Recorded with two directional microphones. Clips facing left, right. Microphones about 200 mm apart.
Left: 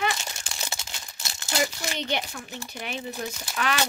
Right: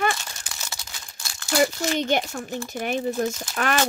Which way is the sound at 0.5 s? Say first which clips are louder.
Left 2 dB; 25° left (ahead or behind).